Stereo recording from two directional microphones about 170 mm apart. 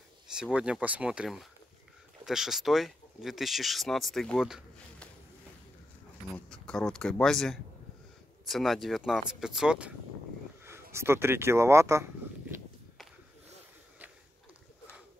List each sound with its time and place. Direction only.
0.3 s speech: 5° right (ahead or behind)
6.3 s speech: 5° left (ahead or behind); by 12.1 s 15° right (ahead or behind)